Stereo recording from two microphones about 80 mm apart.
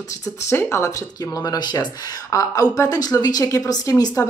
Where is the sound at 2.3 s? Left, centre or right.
Left.